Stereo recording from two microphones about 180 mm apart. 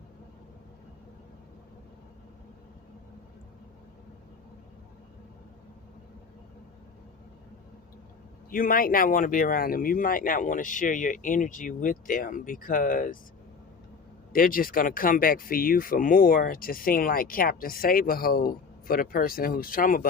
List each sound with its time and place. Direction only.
8.4 s speech: 50° left (ahead or behind)
14.3 s speech: 50° left (ahead or behind)